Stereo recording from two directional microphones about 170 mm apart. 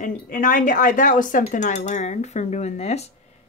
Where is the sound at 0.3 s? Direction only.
50° left (ahead or behind).